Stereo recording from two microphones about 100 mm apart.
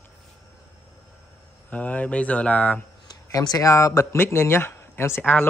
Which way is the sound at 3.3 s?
35° left (ahead or behind).